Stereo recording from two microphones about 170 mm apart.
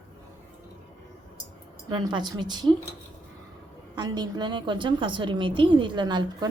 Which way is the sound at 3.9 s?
25° right (ahead or behind).